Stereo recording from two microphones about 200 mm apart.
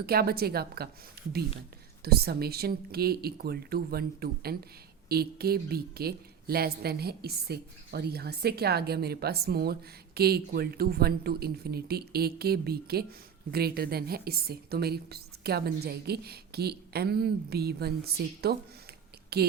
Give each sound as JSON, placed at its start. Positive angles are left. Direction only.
{"t": 0.0, "sound": "a woman's voice", "side_deg": -50}
{"t": 2.0, "sound": "a woman's voice", "side_deg": -50}